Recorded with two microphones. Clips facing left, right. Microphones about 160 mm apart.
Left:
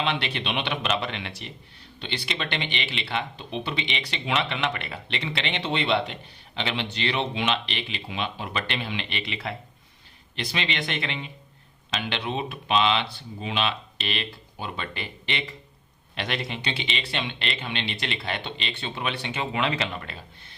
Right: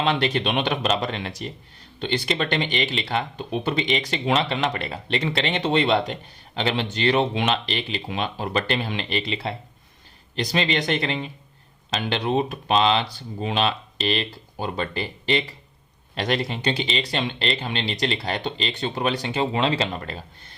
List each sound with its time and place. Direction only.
0.0 s speech: 45° right (ahead or behind)